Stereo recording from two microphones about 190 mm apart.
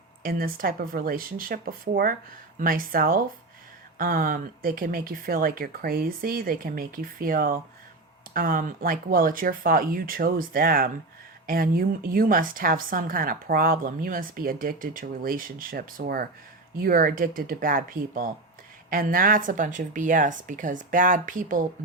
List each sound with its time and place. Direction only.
0.2 s a woman's voice: 50° right (ahead or behind)